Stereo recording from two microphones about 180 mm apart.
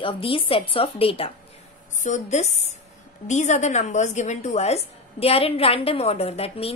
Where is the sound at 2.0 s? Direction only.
40° left (ahead or behind).